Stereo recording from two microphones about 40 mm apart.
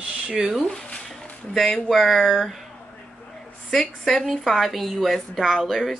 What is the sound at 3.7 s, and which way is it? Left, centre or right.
A woman's voice, centre.